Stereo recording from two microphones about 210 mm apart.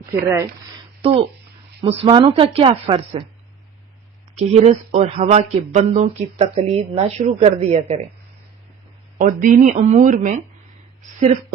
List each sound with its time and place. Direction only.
0.0 s speech: 10° right (ahead or behind)
1.0 s speech: 25° right (ahead or behind)
4.4 s speech: 30° right (ahead or behind)
9.1 s speech: 40° right (ahead or behind)